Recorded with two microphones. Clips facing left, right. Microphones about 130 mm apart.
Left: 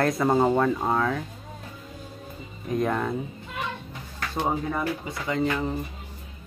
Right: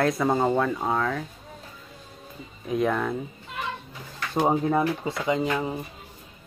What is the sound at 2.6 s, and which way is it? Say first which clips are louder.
Speech: right 1 dB; centre (ahead or behind).